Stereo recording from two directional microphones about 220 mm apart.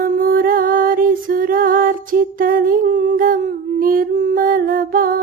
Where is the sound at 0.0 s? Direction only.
40° right (ahead or behind).